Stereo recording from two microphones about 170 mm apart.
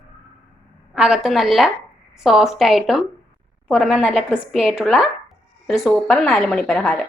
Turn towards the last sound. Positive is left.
turn(degrees=0)  # may be behind; listen again after turning